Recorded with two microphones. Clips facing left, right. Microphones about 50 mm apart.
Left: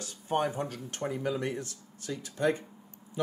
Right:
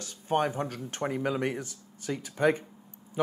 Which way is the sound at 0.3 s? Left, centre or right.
Right.